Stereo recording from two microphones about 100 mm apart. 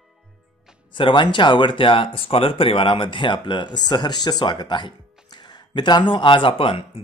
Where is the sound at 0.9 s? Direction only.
55° left (ahead or behind).